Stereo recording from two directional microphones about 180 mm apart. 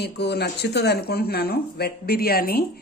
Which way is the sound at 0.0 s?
65° left (ahead or behind).